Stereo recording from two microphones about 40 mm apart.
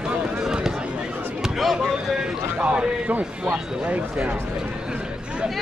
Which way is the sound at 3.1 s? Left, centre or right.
Right.